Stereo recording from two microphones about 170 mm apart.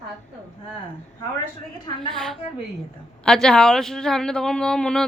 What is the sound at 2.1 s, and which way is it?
Speech, centre (ahead or behind).